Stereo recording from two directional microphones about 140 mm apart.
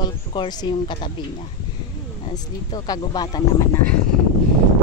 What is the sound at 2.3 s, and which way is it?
Speech, 30° left (ahead or behind).